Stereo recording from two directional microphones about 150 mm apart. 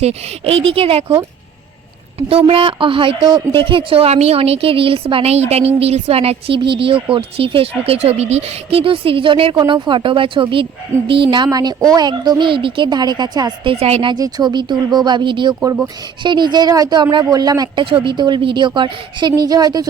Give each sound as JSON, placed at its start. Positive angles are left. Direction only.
{"t": 0.0, "sound": "speech", "side_deg": -45}
{"t": 2.5, "sound": "speech", "side_deg": -35}
{"t": 13.7, "sound": "speech", "side_deg": -45}